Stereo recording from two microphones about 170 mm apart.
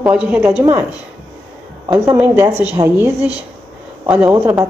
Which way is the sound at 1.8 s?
20° right (ahead or behind).